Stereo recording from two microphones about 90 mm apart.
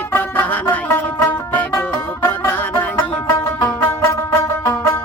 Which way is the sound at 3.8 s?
30° left (ahead or behind).